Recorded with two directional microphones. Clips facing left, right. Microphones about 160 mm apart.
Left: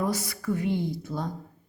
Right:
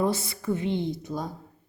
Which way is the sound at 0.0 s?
25° right (ahead or behind).